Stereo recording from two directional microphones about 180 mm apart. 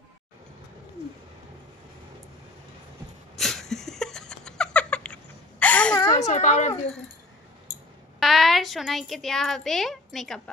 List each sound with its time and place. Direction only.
3.3 s cat: centre (ahead or behind)
6.1 s a child's voice: 40° left (ahead or behind)
8.2 s a woman's voice: centre (ahead or behind)